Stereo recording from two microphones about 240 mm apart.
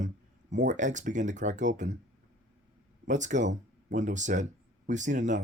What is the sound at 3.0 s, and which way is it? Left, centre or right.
Speech, right.